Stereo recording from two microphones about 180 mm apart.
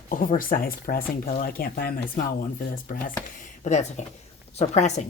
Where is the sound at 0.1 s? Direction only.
50° left (ahead or behind).